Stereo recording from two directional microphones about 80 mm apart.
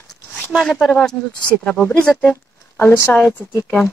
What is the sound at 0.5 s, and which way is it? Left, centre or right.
Speech, centre.